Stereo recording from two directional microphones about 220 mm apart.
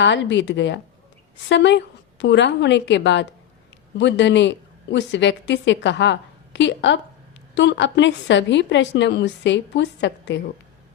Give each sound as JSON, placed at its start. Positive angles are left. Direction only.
{"t": 0.0, "sound": "a woman's voice", "side_deg": 55}